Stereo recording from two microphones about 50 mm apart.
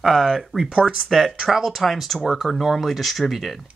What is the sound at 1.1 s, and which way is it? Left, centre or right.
Speech, centre.